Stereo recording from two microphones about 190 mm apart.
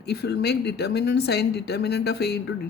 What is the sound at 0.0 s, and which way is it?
A woman's voice, 60° left (ahead or behind).